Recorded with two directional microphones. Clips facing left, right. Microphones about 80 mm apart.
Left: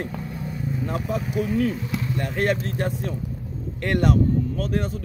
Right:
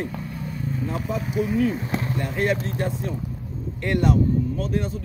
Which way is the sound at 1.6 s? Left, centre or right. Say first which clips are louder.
Right 1 dB; right.